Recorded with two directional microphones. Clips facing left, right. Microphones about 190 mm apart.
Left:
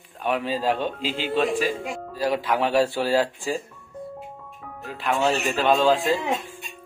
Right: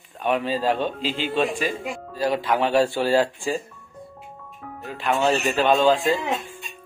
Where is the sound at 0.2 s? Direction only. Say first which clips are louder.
Right 2 dB; 5° left (ahead or behind).